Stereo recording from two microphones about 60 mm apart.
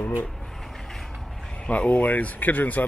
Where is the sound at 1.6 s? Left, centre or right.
Left.